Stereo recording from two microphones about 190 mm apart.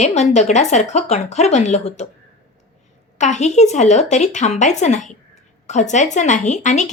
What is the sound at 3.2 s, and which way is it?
A woman's voice, 40° left (ahead or behind).